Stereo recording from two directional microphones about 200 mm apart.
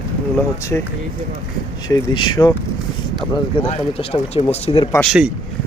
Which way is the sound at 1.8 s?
20° left (ahead or behind).